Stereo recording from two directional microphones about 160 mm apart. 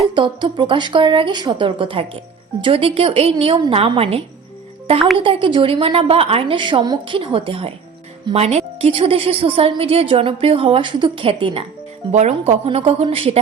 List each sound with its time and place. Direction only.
0.1 s a woman's voice: 30° right (ahead or behind)
12.1 s a woman's voice: 45° right (ahead or behind)